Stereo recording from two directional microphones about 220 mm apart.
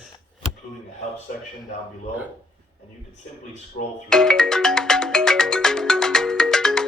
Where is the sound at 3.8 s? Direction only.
40° left (ahead or behind).